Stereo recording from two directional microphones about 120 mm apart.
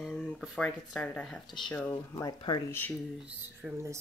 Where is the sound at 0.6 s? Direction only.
10° left (ahead or behind).